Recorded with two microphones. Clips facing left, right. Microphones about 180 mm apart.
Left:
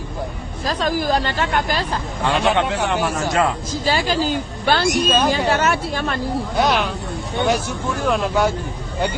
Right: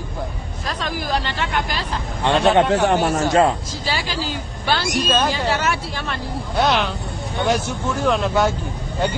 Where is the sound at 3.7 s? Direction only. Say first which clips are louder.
Left 6 dB; 50° left (ahead or behind).